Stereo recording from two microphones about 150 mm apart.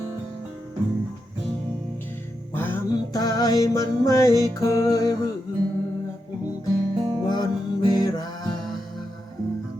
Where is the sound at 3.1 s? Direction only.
25° left (ahead or behind).